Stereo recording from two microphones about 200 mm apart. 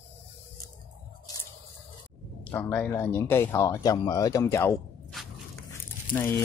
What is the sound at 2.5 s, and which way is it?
Speech, 10° left (ahead or behind).